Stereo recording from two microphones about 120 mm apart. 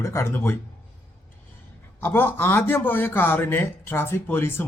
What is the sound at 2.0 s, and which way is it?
A man's voice, 20° left (ahead or behind).